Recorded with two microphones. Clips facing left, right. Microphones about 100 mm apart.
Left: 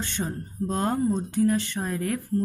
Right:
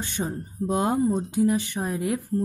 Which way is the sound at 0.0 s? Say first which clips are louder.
Right 1 dB; 15° right (ahead or behind).